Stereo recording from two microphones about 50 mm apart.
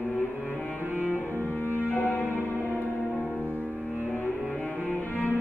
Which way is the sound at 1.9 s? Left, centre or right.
Left.